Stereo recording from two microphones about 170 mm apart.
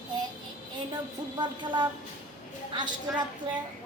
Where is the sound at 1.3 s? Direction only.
25° right (ahead or behind).